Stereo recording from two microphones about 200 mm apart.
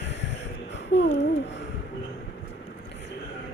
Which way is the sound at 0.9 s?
60° left (ahead or behind).